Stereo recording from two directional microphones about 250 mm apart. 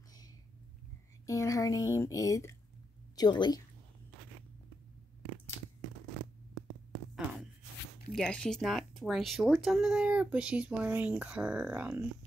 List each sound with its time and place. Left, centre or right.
1.2 s a woman's voice: centre
8.1 s speech: centre